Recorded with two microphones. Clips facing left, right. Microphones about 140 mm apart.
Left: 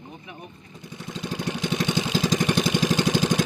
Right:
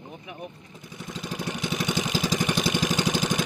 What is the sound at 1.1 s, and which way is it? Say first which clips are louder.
Vehicle: left 3 dB; 20° left (ahead or behind).